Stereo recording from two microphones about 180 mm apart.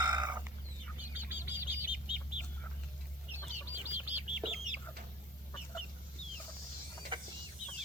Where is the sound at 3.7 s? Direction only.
10° right (ahead or behind).